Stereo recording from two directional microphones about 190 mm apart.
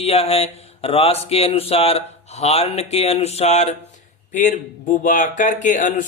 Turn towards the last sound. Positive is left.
turn(degrees=45)  # may be behind; listen again after turning